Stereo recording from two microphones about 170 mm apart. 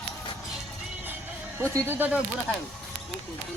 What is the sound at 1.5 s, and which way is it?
Speech, 15° right (ahead or behind).